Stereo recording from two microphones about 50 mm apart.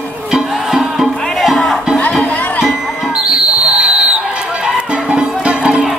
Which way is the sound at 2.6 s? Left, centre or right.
Centre.